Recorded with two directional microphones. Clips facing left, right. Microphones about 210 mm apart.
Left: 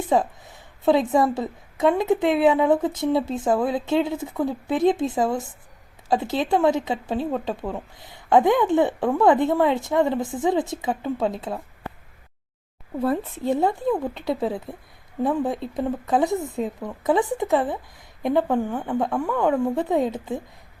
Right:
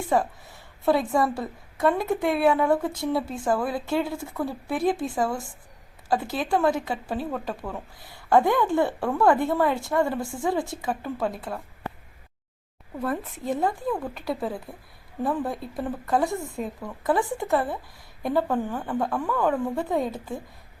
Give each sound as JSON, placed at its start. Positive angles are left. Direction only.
{"t": 0.1, "sound": "speech", "side_deg": 20}
{"t": 13.0, "sound": "a woman's voice", "side_deg": 30}